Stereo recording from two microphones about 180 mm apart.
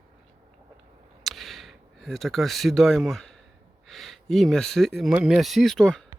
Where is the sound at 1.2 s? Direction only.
Centre (ahead or behind).